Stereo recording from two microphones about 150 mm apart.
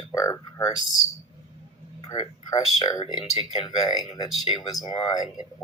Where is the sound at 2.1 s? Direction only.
25° left (ahead or behind).